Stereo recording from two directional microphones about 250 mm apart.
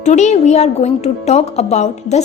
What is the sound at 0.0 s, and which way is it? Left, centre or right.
A woman's voice, left.